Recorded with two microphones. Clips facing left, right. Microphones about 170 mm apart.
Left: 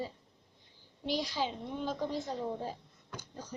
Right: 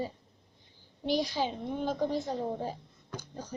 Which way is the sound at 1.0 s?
50° right (ahead or behind).